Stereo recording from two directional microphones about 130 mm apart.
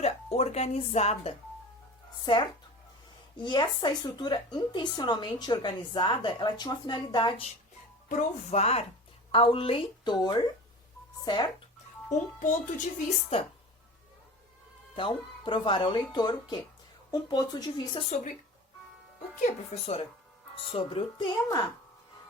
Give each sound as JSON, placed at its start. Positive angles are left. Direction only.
{"t": 0.0, "sound": "music", "side_deg": 55}
{"t": 2.2, "sound": "a woman's voice", "side_deg": 35}
{"t": 8.1, "sound": "speech", "side_deg": 60}
{"t": 9.3, "sound": "a woman's voice", "side_deg": 45}
{"t": 12.1, "sound": "speech", "side_deg": 70}
{"t": 13.3, "sound": "speech", "side_deg": 50}
{"t": 14.9, "sound": "a woman's voice", "side_deg": 40}
{"t": 18.1, "sound": "speech", "side_deg": 65}
{"t": 19.4, "sound": "speech", "side_deg": 60}